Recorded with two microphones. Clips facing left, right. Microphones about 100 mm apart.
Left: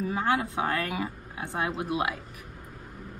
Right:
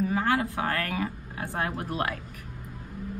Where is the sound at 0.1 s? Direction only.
20° left (ahead or behind).